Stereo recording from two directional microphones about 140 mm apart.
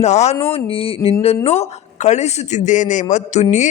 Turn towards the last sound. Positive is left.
turn(degrees=50)  # may be behind; listen again after turning